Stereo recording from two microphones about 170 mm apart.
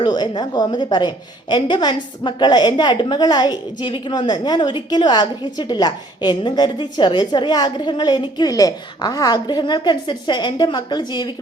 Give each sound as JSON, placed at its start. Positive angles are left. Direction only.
{"t": 0.0, "sound": "a woman's voice", "side_deg": 25}